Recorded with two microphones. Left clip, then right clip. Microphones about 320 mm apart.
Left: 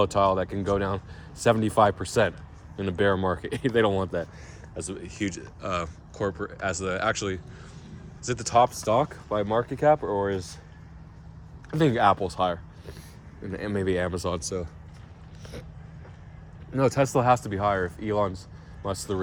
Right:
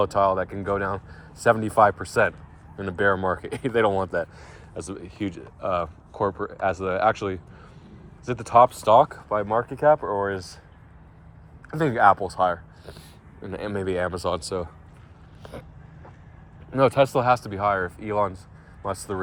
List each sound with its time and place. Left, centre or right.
0.0 s speech: centre
4.8 s speech: centre
7.9 s a sound: centre
8.8 s speech: centre
9.0 s speech: centre
11.7 s speech: centre
16.7 s speech: centre
17.1 s speech: centre